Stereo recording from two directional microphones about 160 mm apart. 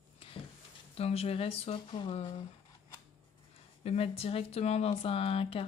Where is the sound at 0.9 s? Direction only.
40° left (ahead or behind).